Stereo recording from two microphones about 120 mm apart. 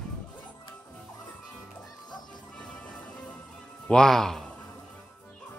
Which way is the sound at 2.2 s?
10° left (ahead or behind).